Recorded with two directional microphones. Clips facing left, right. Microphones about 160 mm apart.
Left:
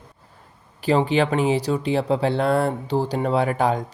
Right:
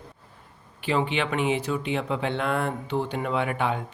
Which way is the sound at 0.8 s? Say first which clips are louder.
Left 6 dB; 40° left (ahead or behind).